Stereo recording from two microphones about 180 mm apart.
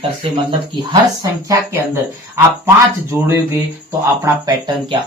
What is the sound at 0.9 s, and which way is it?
Speech, 20° right (ahead or behind).